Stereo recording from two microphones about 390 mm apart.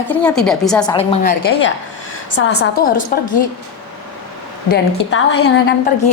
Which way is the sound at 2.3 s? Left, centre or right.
Left.